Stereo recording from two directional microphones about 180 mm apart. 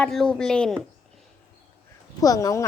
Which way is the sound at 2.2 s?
20° left (ahead or behind).